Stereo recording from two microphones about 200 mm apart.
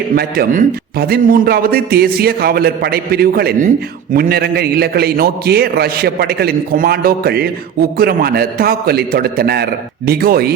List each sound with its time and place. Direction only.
0.2 s a man's voice: 50° right (ahead or behind)